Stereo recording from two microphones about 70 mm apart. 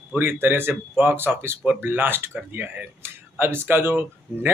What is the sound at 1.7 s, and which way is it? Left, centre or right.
Speech, right.